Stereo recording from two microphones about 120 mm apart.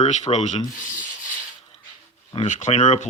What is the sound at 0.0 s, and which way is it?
Speech, 75° left (ahead or behind).